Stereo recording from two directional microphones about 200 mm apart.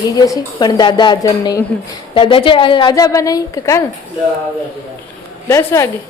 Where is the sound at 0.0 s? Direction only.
20° left (ahead or behind).